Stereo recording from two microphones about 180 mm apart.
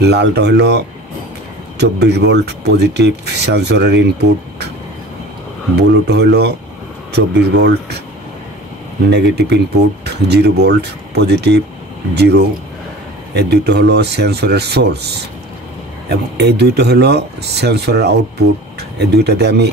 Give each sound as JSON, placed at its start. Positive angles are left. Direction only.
{"t": 0.0, "sound": "speech", "side_deg": -65}
{"t": 5.8, "sound": "speech", "side_deg": -65}
{"t": 9.1, "sound": "speech", "side_deg": -65}